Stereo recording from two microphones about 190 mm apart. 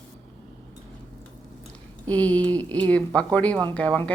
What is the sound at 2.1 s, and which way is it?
Speech, 5° left (ahead or behind).